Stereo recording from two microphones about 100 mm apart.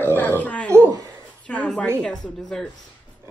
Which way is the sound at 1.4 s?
10° left (ahead or behind).